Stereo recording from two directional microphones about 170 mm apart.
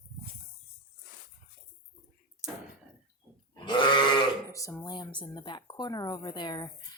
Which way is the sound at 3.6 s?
25° left (ahead or behind).